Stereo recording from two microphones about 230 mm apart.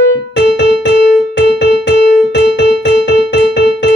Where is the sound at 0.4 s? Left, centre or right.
Left.